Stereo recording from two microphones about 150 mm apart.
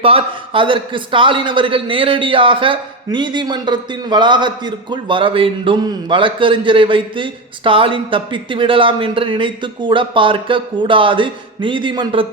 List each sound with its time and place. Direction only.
0.0 s a man's voice: 40° right (ahead or behind)